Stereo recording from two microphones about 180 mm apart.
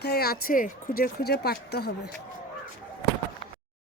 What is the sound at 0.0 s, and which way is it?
Speech, 60° left (ahead or behind).